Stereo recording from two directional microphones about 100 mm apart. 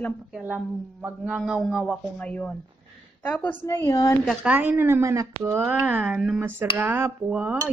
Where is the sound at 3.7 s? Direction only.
35° left (ahead or behind).